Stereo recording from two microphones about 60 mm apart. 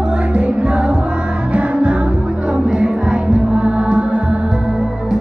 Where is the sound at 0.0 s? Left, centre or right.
Centre.